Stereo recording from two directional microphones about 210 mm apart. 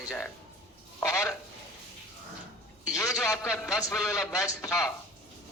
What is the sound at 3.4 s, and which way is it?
A man's voice, 10° left (ahead or behind).